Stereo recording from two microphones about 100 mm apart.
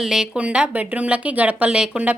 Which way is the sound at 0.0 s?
5° right (ahead or behind).